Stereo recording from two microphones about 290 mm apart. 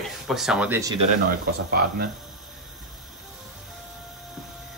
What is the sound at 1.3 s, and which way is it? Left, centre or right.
Speech, right.